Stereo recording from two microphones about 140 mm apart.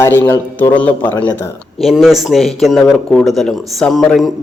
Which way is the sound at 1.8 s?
Centre (ahead or behind).